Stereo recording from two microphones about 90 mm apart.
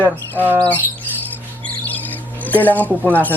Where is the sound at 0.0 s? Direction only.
20° right (ahead or behind).